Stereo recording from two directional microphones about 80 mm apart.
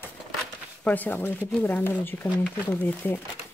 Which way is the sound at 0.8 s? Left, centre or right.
Left.